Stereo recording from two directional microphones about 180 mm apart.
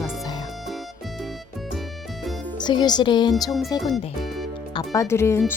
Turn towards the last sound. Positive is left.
turn(degrees=15)  # may be behind; listen again after turning